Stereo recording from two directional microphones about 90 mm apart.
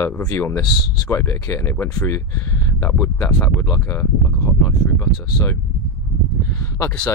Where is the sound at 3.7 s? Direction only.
25° left (ahead or behind).